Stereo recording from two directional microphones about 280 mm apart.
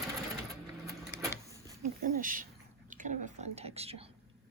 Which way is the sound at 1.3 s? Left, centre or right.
Centre.